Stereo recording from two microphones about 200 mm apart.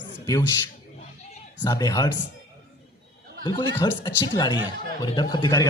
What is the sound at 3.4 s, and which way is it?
Speech, 25° left (ahead or behind).